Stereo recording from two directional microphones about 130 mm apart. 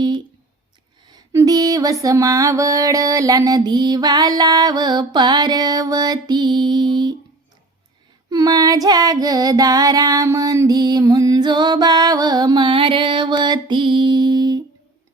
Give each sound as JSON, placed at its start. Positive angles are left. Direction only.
{"t": 1.0, "sound": "music", "side_deg": -25}
{"t": 8.3, "sound": "music", "side_deg": -30}